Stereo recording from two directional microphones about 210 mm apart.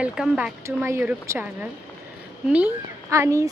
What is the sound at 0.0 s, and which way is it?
A woman's voice, 5° right (ahead or behind).